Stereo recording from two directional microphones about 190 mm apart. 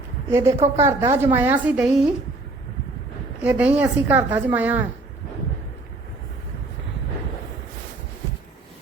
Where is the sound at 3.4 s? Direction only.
5° right (ahead or behind).